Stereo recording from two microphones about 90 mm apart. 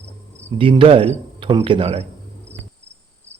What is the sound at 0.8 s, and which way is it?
A man's voice, 80° right.